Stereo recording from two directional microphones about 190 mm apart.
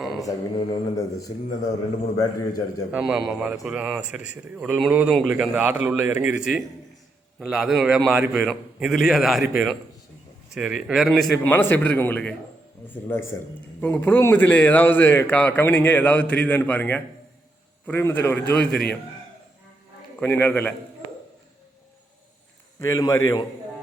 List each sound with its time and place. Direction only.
0.3 s a man's voice: 15° left (ahead or behind)
2.1 s a man's voice: 20° left (ahead or behind)
2.9 s a man's voice: 5° right (ahead or behind)
20.1 s a man's voice: 10° left (ahead or behind)
22.8 s a man's voice: 15° left (ahead or behind)